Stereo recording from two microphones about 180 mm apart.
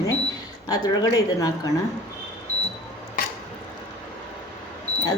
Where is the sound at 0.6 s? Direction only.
20° left (ahead or behind).